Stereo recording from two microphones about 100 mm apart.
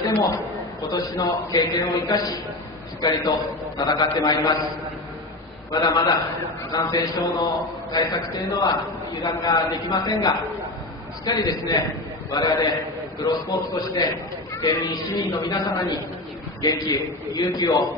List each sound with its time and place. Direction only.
0.8 s a man's voice: 35° left (ahead or behind)
5.7 s a man's voice: 45° left (ahead or behind)
11.4 s a man's voice: 35° left (ahead or behind)